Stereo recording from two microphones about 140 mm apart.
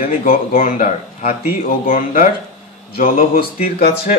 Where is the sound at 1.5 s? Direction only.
90° left.